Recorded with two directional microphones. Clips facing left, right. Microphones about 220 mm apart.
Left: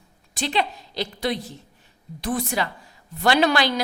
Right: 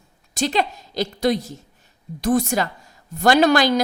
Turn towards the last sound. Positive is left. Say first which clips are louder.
# right 4 dB
turn(degrees=-45)  # may be behind; listen again after turning